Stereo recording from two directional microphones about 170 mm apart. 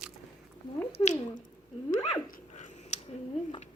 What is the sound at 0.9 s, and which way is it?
Squish, 40° left (ahead or behind).